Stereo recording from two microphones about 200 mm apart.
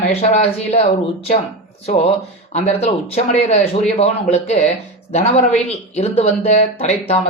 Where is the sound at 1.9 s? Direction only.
30° left (ahead or behind).